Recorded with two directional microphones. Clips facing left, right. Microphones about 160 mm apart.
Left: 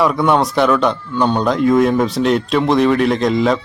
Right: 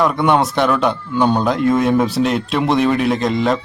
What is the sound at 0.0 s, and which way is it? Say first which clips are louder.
Speech: left 1 dB; centre (ahead or behind).